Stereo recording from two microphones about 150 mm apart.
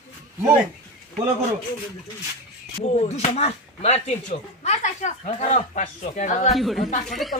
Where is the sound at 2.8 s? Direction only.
50° left (ahead or behind).